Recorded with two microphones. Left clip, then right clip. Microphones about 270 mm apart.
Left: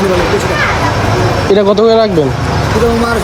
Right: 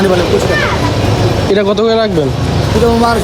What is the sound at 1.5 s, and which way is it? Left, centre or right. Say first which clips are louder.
Speech: left 4 dB; centre.